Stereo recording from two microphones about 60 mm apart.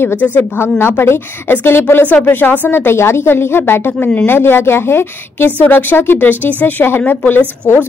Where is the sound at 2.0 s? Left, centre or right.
Left.